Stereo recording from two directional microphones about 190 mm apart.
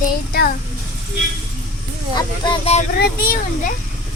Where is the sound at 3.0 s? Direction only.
50° left (ahead or behind).